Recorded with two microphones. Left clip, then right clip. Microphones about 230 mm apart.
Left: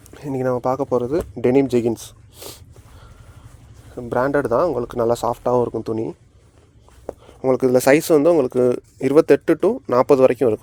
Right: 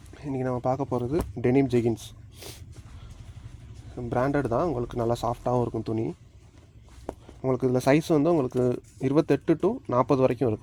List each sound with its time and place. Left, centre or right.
0.1 s speech: left
3.9 s speech: left
7.1 s a sound: centre
7.4 s speech: left